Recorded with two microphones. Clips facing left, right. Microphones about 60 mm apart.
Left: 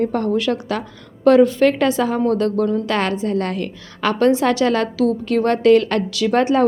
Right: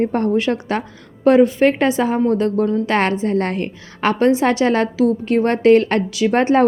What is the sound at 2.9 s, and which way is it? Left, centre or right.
A woman's voice, right.